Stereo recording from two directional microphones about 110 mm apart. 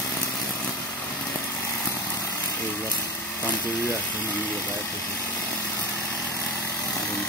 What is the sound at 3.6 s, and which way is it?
Speech, 15° left (ahead or behind).